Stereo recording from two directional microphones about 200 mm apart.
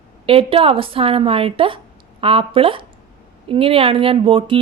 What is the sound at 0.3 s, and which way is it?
A woman's voice, 25° right (ahead or behind).